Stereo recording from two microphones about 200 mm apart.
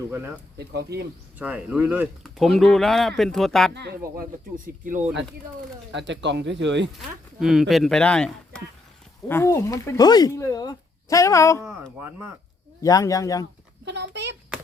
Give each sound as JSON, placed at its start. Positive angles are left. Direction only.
{"t": 0.1, "sound": "speech", "side_deg": -10}
{"t": 0.6, "sound": "speech", "side_deg": -55}
{"t": 1.4, "sound": "speech", "side_deg": -5}
{"t": 3.8, "sound": "speech", "side_deg": -50}
{"t": 5.9, "sound": "speech", "side_deg": -65}
{"t": 7.3, "sound": "speech", "side_deg": 0}
{"t": 11.9, "sound": "speech", "side_deg": -10}
{"t": 12.8, "sound": "speech", "side_deg": 15}
{"t": 13.8, "sound": "speech", "side_deg": -60}